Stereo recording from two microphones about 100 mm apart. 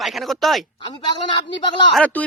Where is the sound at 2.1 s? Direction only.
15° left (ahead or behind).